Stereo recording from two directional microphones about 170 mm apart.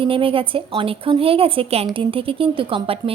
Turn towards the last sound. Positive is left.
turn(degrees=-30)  # may be behind; listen again after turning